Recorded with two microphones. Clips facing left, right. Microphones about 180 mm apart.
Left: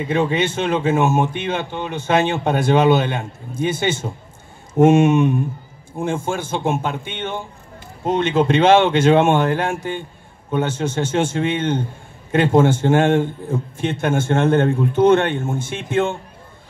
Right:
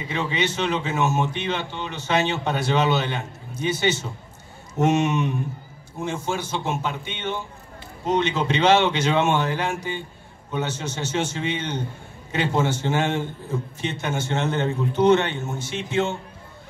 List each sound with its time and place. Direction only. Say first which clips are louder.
0.0 s speech: left 7 dB; 50° left (ahead or behind)